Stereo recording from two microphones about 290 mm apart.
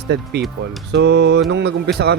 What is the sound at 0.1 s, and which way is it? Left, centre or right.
Speech, right.